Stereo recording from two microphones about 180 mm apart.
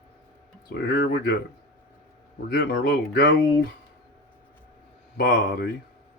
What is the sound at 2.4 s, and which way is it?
Speech, 65° left (ahead or behind).